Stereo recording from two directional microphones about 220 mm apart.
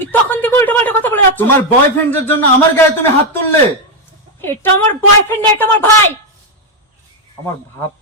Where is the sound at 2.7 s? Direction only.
10° left (ahead or behind).